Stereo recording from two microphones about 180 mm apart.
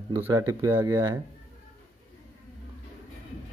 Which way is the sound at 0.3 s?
15° right (ahead or behind).